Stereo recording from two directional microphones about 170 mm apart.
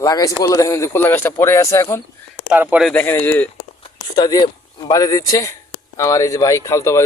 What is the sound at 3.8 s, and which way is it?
Speech, 25° left (ahead or behind).